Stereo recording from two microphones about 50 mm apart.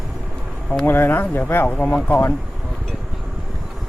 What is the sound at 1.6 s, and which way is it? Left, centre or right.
Speech, left.